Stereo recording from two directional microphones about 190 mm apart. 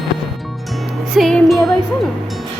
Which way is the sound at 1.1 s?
Centre (ahead or behind).